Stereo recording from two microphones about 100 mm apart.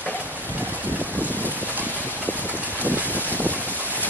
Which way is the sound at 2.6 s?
15° right (ahead or behind).